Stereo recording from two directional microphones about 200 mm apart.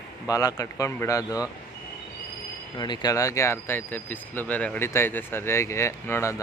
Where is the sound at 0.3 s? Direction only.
20° left (ahead or behind).